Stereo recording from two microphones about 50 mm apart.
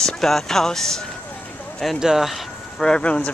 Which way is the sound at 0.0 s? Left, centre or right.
Centre.